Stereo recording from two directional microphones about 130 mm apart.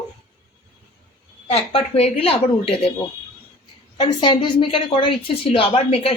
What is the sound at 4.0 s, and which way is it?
A woman's voice, 40° left (ahead or behind).